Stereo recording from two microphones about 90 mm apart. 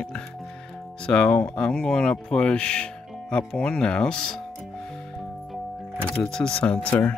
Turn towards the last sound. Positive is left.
turn(degrees=15)  # may be behind; listen again after turning